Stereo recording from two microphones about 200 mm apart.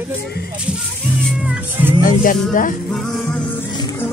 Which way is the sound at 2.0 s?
45° left (ahead or behind).